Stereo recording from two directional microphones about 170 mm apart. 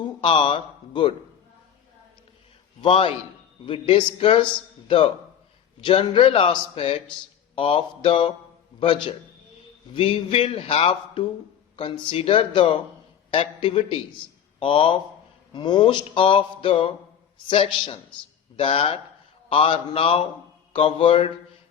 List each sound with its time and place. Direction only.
0.0 s speech: 30° left (ahead or behind)
2.8 s a man's voice: 35° left (ahead or behind)
5.8 s a man's voice: 30° left (ahead or behind)
8.8 s a sound: 30° left (ahead or behind)
9.9 s a man's voice: 30° left (ahead or behind)
15.5 s a sound: 25° left (ahead or behind)
17.5 s a man's voice: 30° left (ahead or behind)